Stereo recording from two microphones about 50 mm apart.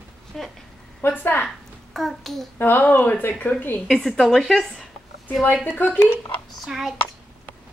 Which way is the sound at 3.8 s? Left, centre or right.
Centre.